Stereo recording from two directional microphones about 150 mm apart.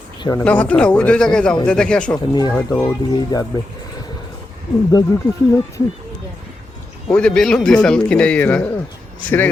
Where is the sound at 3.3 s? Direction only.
30° left (ahead or behind).